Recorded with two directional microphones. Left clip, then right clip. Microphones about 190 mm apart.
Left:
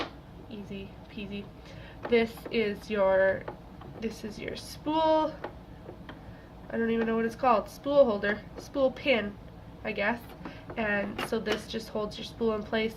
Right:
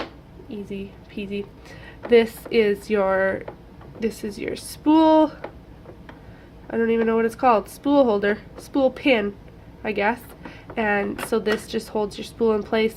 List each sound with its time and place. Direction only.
0.7 s speech: 60° right (ahead or behind)
6.7 s speech: 55° right (ahead or behind)